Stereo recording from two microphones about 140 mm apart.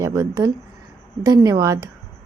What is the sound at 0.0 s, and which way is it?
A woman's voice, 20° right (ahead or behind).